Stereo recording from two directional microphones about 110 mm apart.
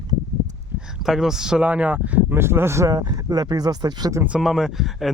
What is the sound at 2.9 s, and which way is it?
Speech, 40° right (ahead or behind).